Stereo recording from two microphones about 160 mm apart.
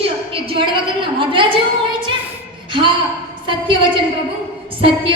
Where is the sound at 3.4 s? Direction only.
30° right (ahead or behind).